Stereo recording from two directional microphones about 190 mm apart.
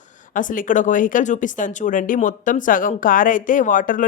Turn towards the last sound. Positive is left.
turn(degrees=45)  # may be behind; listen again after turning